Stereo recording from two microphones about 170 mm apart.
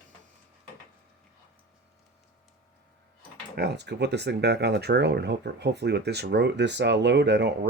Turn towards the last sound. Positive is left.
turn(degrees=-90)